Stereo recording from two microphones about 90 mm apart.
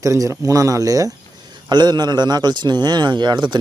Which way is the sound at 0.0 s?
35° right (ahead or behind).